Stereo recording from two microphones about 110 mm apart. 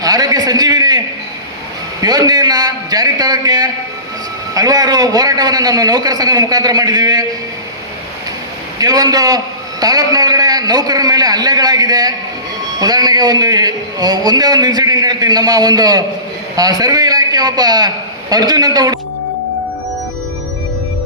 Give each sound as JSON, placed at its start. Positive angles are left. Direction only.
{"t": 0.0, "sound": "a sound", "side_deg": -35}
{"t": 2.0, "sound": "a man's voice", "side_deg": -35}
{"t": 8.8, "sound": "a man's voice", "side_deg": -35}